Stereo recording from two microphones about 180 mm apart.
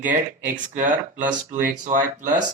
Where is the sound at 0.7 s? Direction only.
45° right (ahead or behind).